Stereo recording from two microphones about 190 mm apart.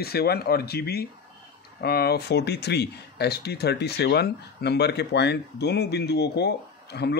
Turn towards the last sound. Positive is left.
turn(degrees=60)  # may be behind; listen again after turning